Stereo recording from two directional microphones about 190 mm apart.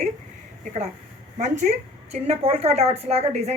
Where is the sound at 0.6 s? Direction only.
35° right (ahead or behind).